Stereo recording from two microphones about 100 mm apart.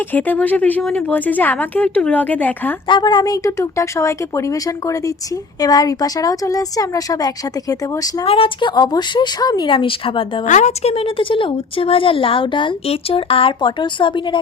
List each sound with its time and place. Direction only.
0.1 s speech: 15° left (ahead or behind)
2.8 s speech: 50° left (ahead or behind)
8.2 s a woman's voice: 60° left (ahead or behind)
8.7 s speech: 40° left (ahead or behind)
9.6 s a woman's voice: 60° left (ahead or behind)